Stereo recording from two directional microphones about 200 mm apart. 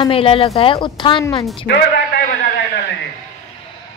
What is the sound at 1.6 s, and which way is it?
Speech, 55° left (ahead or behind).